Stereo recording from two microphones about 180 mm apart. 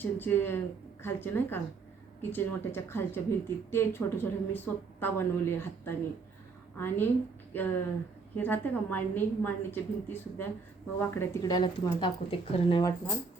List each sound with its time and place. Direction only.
0.0 s a woman's voice: 10° left (ahead or behind)